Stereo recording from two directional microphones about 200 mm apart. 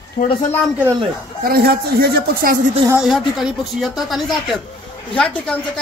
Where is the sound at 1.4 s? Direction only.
50° right (ahead or behind).